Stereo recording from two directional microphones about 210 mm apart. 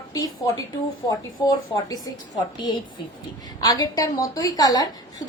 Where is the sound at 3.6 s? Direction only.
15° left (ahead or behind).